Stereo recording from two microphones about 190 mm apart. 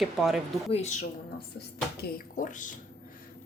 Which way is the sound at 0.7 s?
35° left (ahead or behind).